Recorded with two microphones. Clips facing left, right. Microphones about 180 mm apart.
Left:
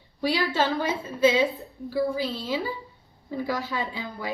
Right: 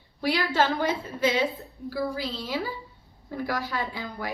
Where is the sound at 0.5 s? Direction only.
15° left (ahead or behind).